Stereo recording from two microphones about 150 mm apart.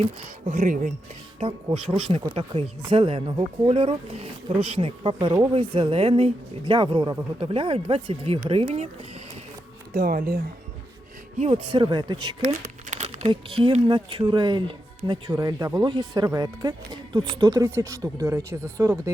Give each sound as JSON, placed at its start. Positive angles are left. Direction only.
{"t": 0.0, "sound": "speech", "side_deg": -50}
{"t": 1.4, "sound": "speech", "side_deg": -40}
{"t": 9.9, "sound": "speech", "side_deg": -75}
{"t": 11.3, "sound": "speech", "side_deg": -40}
{"t": 12.4, "sound": "crumpling", "side_deg": -50}
{"t": 13.3, "sound": "speech", "side_deg": -30}